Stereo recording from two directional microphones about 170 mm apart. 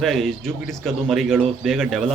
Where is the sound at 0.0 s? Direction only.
Centre (ahead or behind).